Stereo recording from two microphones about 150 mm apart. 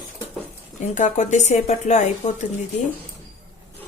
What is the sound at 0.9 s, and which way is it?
Speech, 55° left (ahead or behind).